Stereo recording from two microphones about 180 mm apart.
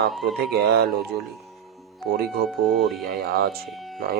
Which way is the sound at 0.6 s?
65° right (ahead or behind).